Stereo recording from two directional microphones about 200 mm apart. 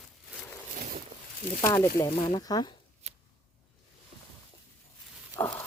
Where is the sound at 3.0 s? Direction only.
35° right (ahead or behind).